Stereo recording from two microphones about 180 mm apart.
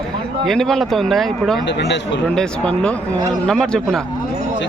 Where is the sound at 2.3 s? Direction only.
5° left (ahead or behind).